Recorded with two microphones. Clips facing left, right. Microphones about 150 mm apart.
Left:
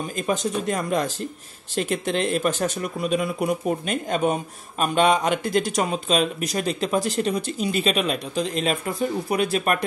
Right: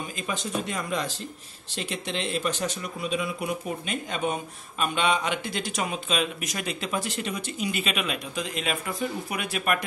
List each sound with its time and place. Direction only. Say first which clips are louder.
0.1 s speech: left 8 dB; 45° left (ahead or behind)